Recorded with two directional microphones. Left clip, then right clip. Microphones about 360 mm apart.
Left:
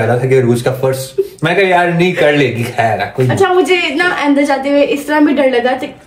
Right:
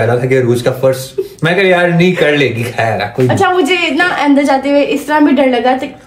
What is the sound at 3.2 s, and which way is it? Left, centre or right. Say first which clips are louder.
A woman's voice: even; centre.